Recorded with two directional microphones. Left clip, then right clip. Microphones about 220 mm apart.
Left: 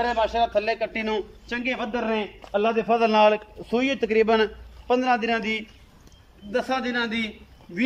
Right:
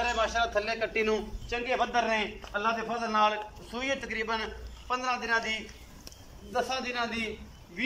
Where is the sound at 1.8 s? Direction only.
10° left (ahead or behind).